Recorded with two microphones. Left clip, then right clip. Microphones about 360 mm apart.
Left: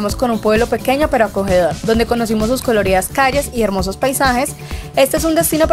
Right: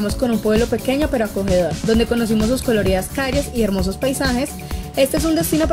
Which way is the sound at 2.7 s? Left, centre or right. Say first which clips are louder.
Left 7 dB; centre.